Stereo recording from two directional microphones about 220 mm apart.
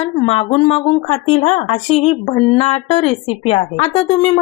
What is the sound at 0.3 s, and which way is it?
Speech, 25° left (ahead or behind).